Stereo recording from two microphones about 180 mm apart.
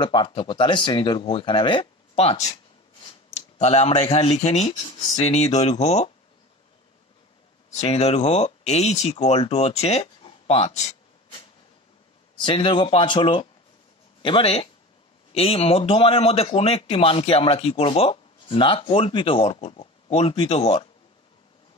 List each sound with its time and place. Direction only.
0.0 s speech: 25° left (ahead or behind)
5.2 s speech: 35° left (ahead or behind)
7.7 s speech: 35° left (ahead or behind)
12.4 s speech: 25° left (ahead or behind)